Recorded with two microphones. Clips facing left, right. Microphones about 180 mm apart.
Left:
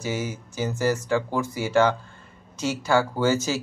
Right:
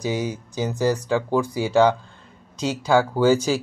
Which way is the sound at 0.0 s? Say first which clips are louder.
Right 4 dB; 15° right (ahead or behind).